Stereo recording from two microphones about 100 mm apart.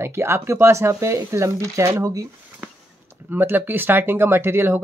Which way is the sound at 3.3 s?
20° right (ahead or behind).